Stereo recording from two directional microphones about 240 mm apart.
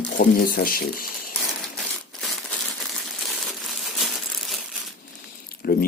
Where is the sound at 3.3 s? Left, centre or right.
Centre.